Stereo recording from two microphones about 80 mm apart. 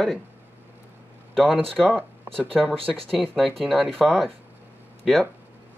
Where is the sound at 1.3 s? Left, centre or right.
Centre.